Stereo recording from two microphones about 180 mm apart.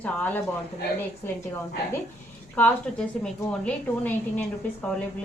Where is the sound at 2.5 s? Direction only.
5° left (ahead or behind).